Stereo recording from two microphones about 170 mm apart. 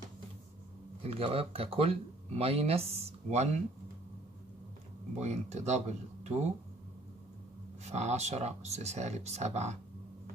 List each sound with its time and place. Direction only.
1.0 s speech: 35° right (ahead or behind)
5.1 s speech: 40° right (ahead or behind)
7.8 s speech: 40° right (ahead or behind)